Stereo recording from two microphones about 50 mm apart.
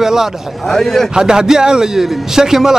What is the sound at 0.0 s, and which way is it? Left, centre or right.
Speech, centre.